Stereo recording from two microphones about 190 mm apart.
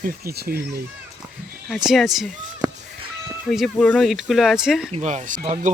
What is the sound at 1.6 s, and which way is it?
Speech, centre (ahead or behind).